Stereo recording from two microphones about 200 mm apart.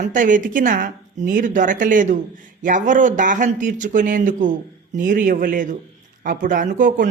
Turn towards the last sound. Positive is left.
turn(degrees=-40)  # may be behind; listen again after turning